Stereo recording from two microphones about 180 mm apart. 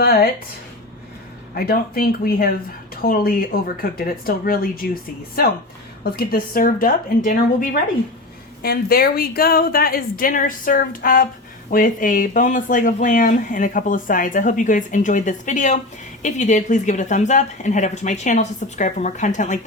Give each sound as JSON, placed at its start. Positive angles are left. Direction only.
{"t": 0.0, "sound": "speech", "side_deg": 55}
{"t": 1.5, "sound": "a woman's voice", "side_deg": 55}